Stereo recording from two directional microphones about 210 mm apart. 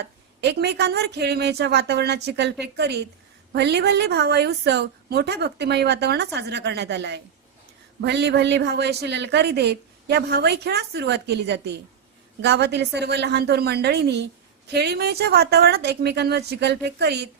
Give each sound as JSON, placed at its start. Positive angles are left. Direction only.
{"t": 0.4, "sound": "a woman's voice", "side_deg": -55}